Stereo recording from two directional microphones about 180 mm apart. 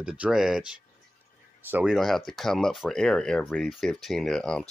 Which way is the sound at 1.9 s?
Centre (ahead or behind).